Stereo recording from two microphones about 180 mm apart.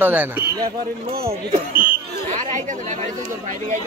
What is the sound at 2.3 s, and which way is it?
Speech, 45° right (ahead or behind).